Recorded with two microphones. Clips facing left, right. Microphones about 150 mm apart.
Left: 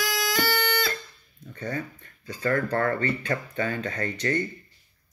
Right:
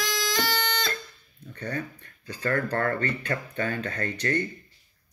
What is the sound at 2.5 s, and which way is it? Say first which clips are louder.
Speech: left 2 dB; 25° left (ahead or behind).